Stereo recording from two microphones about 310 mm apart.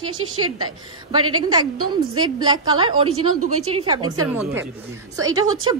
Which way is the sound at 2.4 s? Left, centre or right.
Centre.